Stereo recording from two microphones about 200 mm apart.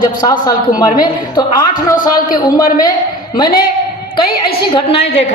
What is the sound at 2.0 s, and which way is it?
Speech, 45° left (ahead or behind).